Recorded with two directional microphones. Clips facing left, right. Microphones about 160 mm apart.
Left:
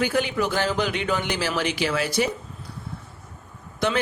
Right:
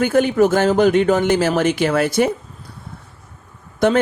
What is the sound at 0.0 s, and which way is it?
Speech, 50° right (ahead or behind).